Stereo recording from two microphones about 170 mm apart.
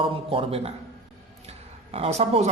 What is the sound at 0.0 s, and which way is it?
Speech, 30° right (ahead or behind).